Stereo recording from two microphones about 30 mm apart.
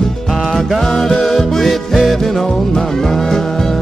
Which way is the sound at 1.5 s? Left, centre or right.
Centre.